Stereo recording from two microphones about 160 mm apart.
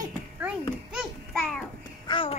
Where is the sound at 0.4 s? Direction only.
5° right (ahead or behind).